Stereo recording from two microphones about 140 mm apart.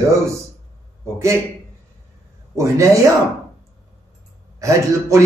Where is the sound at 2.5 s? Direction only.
20° right (ahead or behind).